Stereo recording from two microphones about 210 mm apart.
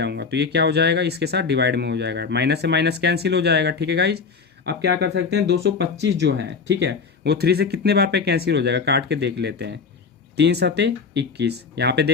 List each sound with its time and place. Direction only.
0.0 s speech: 55° right (ahead or behind)